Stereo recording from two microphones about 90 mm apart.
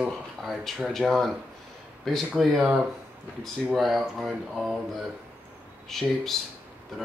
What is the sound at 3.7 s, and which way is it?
Speech, centre (ahead or behind).